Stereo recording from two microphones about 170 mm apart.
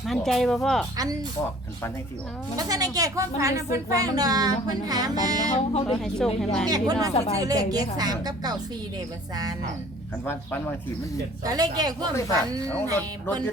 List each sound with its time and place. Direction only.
0.0 s speech: centre (ahead or behind)
0.9 s speech: 20° right (ahead or behind)
2.6 s speech: 20° right (ahead or behind)
5.5 s speech: 35° left (ahead or behind)
6.0 s speech: centre (ahead or behind)
6.7 s speech: 20° right (ahead or behind)
7.1 s speech: 35° left (ahead or behind)
7.3 s speech: 20° right (ahead or behind)
11.4 s speech: 20° right (ahead or behind)
13.0 s speech: 10° left (ahead or behind)